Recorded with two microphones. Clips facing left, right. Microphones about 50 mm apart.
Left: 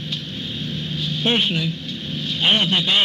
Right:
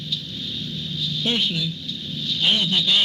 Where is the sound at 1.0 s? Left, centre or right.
Left.